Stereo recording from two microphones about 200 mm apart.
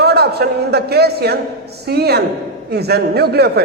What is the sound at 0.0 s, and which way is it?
A man's voice, 55° right (ahead or behind).